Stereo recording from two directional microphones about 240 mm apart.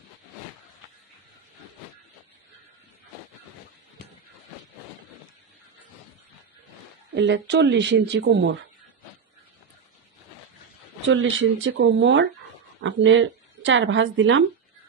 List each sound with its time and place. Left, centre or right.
7.2 s speech: right
11.1 s speech: right